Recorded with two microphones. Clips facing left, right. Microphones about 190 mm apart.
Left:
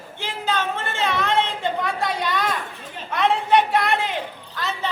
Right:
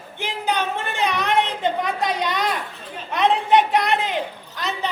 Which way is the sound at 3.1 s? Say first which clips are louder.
Right 1 dB; 20° right (ahead or behind).